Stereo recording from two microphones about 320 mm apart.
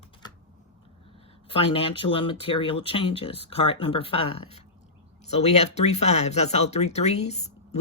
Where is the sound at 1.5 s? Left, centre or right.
Centre.